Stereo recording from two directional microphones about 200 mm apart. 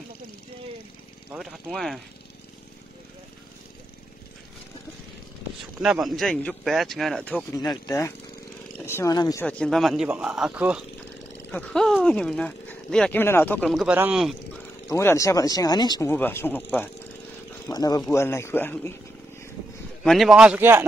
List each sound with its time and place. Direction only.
1.3 s speech: 5° right (ahead or behind)
5.8 s speech: centre (ahead or behind)
7.5 s speech: 20° left (ahead or behind)
9.5 s speech: 5° left (ahead or behind)
11.5 s speech: 5° left (ahead or behind)
14.9 s speech: 15° left (ahead or behind)
20.0 s speech: centre (ahead or behind)